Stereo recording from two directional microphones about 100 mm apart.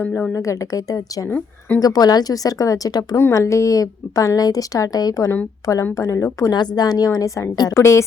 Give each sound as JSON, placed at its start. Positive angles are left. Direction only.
{"t": 0.0, "sound": "speech", "side_deg": 15}
{"t": 0.3, "sound": "a woman's voice", "side_deg": 35}